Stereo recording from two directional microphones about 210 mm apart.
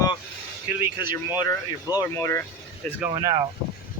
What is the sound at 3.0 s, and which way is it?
Speech, 15° right (ahead or behind).